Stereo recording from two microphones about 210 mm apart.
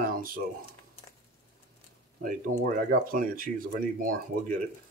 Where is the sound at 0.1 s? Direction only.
45° right (ahead or behind).